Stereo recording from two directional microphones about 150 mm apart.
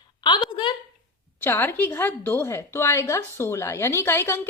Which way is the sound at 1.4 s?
15° left (ahead or behind).